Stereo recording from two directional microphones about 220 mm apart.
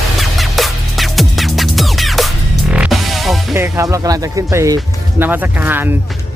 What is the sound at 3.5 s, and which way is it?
Speech, 10° right (ahead or behind).